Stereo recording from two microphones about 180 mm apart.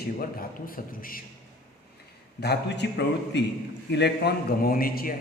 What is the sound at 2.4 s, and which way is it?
A man's voice, 65° left (ahead or behind).